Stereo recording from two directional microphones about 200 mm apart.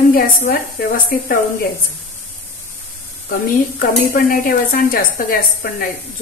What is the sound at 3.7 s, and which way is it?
A woman's voice, 45° left (ahead or behind).